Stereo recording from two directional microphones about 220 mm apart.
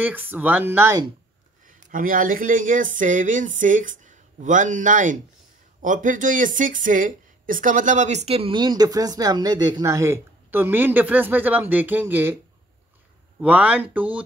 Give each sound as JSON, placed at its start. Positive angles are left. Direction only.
{"t": 0.0, "sound": "speech", "side_deg": -10}
{"t": 1.7, "sound": "a woman's voice", "side_deg": -40}
{"t": 13.4, "sound": "speech", "side_deg": -5}